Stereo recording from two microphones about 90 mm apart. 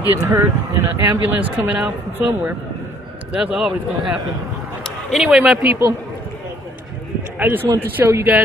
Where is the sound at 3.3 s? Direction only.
10° right (ahead or behind).